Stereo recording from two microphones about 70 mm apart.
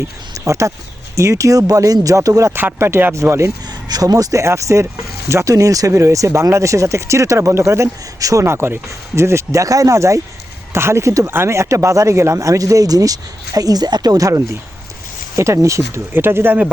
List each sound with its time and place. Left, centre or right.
0.3 s speech: right
2.6 s speech: right
3.7 s speech: right
8.4 s speech: right
16.1 s speech: right